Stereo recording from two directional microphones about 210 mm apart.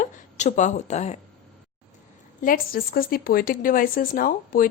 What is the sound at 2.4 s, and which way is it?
Speech, 40° left (ahead or behind).